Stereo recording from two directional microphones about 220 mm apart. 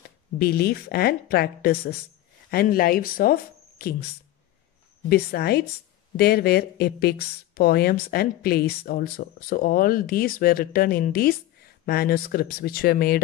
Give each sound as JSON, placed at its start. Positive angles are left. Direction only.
{"t": 0.4, "sound": "speech", "side_deg": 45}
{"t": 5.1, "sound": "speech", "side_deg": 45}